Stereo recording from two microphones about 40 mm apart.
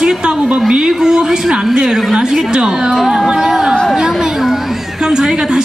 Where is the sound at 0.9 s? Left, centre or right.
Centre.